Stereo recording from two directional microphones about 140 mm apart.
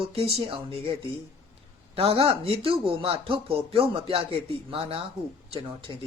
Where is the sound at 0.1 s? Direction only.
45° right (ahead or behind).